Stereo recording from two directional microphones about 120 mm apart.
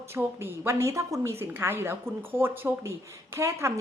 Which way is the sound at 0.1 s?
20° right (ahead or behind).